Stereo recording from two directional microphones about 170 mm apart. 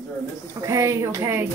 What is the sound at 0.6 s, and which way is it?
Speech, 15° right (ahead or behind).